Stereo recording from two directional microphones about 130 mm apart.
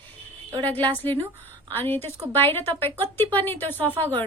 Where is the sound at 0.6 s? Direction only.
15° left (ahead or behind).